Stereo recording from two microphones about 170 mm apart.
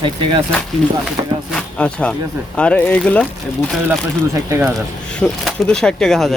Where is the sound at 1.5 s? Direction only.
5° left (ahead or behind).